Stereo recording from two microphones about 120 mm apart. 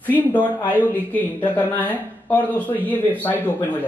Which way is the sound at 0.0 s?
15° left (ahead or behind).